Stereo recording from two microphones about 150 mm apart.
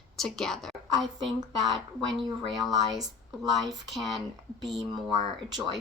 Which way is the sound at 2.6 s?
Centre (ahead or behind).